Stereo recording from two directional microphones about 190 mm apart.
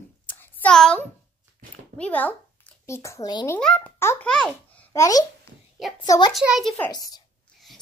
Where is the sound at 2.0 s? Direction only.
10° left (ahead or behind).